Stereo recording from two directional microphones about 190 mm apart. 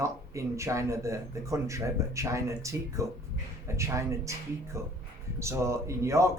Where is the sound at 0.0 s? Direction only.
15° right (ahead or behind).